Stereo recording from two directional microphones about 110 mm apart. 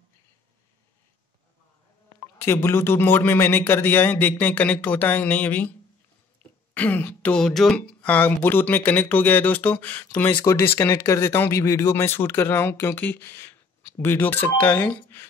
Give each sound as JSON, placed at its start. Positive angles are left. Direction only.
{"t": 2.3, "sound": "speech", "side_deg": 20}
{"t": 6.7, "sound": "speech", "side_deg": 15}